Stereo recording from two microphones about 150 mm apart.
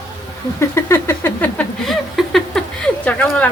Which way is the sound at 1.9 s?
Centre (ahead or behind).